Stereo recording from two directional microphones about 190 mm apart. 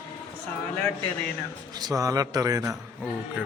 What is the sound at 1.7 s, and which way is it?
A man's voice, 20° right (ahead or behind).